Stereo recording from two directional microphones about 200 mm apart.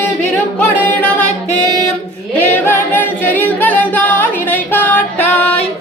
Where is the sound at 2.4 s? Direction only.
10° left (ahead or behind).